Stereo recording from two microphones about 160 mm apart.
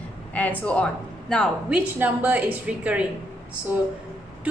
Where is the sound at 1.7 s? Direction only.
10° right (ahead or behind).